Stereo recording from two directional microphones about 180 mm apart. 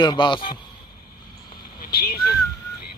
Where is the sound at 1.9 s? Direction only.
60° left (ahead or behind).